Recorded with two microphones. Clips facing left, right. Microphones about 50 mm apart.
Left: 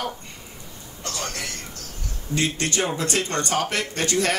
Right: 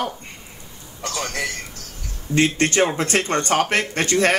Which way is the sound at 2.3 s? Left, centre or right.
Right.